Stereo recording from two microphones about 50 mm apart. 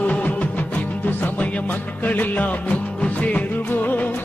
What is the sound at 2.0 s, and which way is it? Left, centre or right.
Music, left.